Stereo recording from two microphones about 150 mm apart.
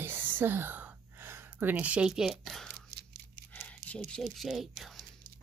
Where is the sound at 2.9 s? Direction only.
90° right.